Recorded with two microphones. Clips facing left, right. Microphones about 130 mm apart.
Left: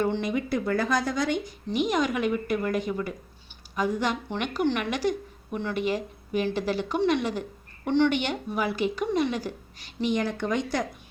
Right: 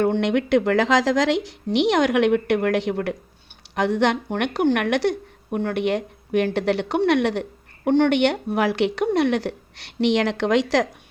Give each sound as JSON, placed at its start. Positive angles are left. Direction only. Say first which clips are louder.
{"t": 0.2, "sound": "a woman's voice", "louder": "right 8 dB", "side_deg": -80}
{"t": 7.9, "sound": "a woman's voice", "louder": "right 6 dB", "side_deg": -55}